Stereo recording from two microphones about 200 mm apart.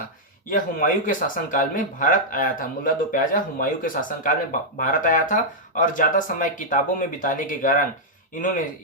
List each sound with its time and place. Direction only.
0.5 s speech: 40° left (ahead or behind)